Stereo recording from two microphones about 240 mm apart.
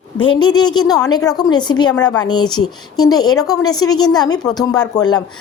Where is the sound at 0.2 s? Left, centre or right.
Centre.